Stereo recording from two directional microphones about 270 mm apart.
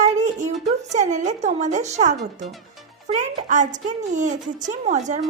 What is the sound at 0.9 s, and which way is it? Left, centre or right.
A woman's voice, right.